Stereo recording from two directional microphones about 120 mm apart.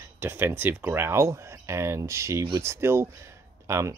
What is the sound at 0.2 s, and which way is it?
Speech, 20° right (ahead or behind).